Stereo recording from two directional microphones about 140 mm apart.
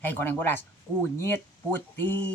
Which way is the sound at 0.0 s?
15° left (ahead or behind).